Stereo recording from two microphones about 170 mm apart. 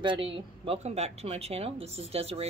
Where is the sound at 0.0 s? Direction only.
30° right (ahead or behind).